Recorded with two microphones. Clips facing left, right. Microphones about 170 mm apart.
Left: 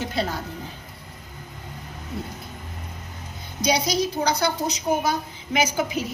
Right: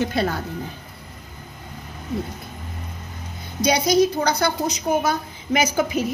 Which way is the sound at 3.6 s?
55° right (ahead or behind).